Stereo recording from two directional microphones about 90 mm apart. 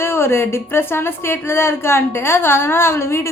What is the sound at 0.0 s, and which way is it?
Speech, 25° left (ahead or behind).